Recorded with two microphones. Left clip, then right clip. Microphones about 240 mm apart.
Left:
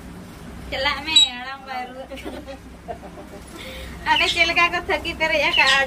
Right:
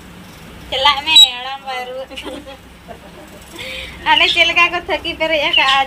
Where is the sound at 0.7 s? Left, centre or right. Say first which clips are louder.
Right 9 dB; centre.